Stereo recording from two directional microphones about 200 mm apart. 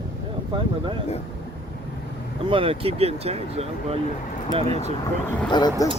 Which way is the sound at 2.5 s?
30° right (ahead or behind).